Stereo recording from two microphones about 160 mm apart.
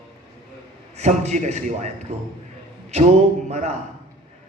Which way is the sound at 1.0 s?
45° right (ahead or behind).